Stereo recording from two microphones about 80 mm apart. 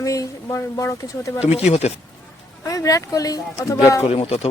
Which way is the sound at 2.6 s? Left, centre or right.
Left.